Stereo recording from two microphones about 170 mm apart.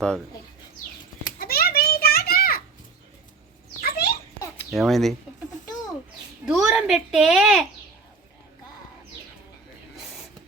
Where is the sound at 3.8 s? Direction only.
65° left (ahead or behind).